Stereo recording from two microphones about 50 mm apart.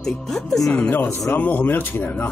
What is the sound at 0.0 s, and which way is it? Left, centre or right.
Speech, centre.